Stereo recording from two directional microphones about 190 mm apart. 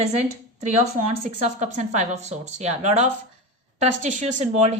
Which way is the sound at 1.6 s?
40° right (ahead or behind).